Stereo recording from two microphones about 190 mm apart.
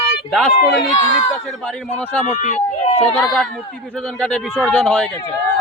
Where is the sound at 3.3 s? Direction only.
5° left (ahead or behind).